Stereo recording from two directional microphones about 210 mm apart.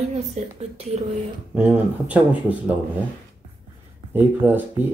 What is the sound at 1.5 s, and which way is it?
Speech, 5° right (ahead or behind).